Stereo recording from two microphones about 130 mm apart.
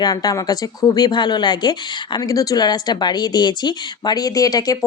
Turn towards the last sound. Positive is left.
turn(degrees=30)  # may be behind; listen again after turning